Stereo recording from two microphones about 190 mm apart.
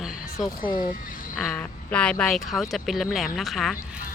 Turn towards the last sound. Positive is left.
turn(degrees=0)  # may be behind; listen again after turning